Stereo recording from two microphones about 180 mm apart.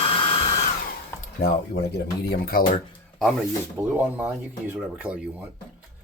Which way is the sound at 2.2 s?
55° left (ahead or behind).